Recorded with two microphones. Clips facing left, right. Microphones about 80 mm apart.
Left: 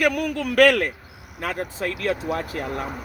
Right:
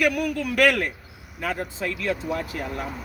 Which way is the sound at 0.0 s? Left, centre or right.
Left.